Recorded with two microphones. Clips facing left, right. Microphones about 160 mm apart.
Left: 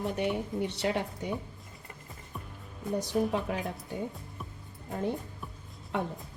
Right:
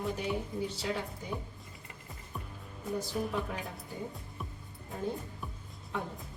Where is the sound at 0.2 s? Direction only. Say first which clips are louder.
Left 4 dB; 70° left (ahead or behind).